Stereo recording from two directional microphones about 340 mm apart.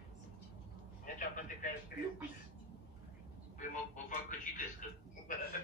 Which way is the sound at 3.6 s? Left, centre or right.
Left.